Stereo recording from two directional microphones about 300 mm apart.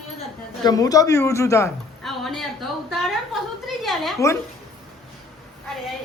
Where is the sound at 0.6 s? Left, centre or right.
Centre.